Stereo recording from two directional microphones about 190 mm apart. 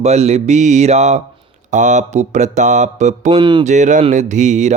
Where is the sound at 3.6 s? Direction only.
40° right (ahead or behind).